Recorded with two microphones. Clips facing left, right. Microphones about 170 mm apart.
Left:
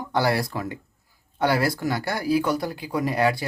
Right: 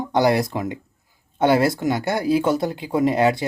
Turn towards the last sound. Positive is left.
turn(degrees=-20)  # may be behind; listen again after turning